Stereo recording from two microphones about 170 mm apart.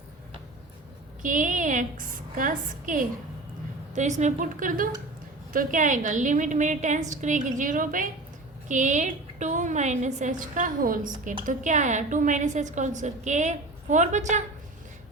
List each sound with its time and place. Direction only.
1.2 s a woman's voice: 50° right (ahead or behind)